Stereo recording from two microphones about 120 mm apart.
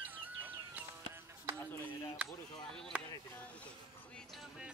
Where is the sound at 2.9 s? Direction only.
10° right (ahead or behind).